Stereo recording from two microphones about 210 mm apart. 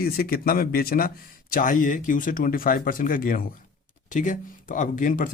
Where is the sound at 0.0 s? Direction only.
45° left (ahead or behind).